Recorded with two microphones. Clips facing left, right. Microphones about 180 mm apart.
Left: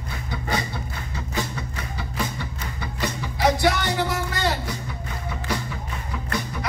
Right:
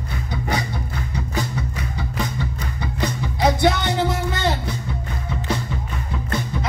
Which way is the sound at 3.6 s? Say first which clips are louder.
Right 3 dB; 20° right (ahead or behind).